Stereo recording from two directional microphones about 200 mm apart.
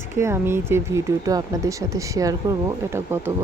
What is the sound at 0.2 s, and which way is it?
Speech, 15° right (ahead or behind).